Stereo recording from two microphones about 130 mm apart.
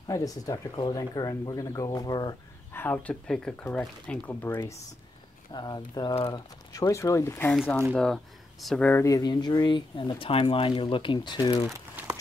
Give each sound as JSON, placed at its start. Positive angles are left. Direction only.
{"t": 0.0, "sound": "speech", "side_deg": 25}
{"t": 2.7, "sound": "speech", "side_deg": 15}
{"t": 5.5, "sound": "speech", "side_deg": 35}
{"t": 6.1, "sound": "speech", "side_deg": 45}
{"t": 6.7, "sound": "speech", "side_deg": 25}
{"t": 7.9, "sound": "speech", "side_deg": 5}
{"t": 9.0, "sound": "speech", "side_deg": 30}